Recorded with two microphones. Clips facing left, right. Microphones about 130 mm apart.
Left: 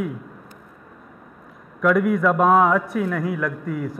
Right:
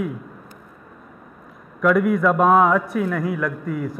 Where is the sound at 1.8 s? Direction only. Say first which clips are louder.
Right 1 dB; 15° right (ahead or behind).